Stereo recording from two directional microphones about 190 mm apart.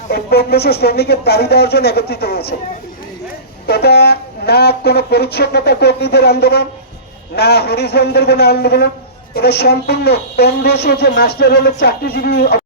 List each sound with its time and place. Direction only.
0.1 s a woman's voice: 60° left (ahead or behind)
3.7 s a woman's voice: 60° left (ahead or behind)